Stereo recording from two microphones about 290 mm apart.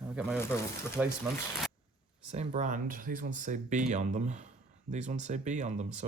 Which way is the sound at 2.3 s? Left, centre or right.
Right.